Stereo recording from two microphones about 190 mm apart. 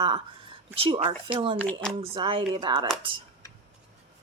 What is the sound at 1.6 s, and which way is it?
Speech, 5° left (ahead or behind).